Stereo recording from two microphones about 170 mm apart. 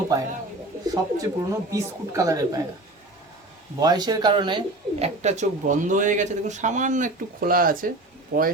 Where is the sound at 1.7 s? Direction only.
20° right (ahead or behind).